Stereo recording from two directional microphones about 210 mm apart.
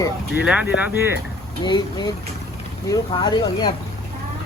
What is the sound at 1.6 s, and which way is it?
Speech, 20° left (ahead or behind).